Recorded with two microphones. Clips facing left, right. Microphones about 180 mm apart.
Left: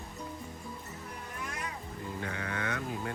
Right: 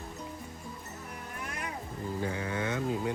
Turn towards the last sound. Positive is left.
turn(degrees=-25)  # may be behind; listen again after turning